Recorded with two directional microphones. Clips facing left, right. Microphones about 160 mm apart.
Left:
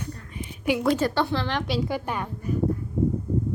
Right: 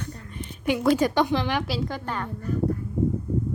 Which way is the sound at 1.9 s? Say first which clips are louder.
Left 2 dB; 10° left (ahead or behind).